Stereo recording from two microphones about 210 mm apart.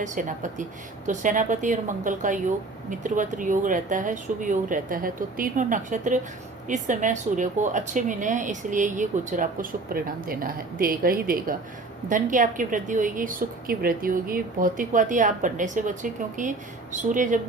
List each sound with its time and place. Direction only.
0.0 s a woman's voice: 35° right (ahead or behind)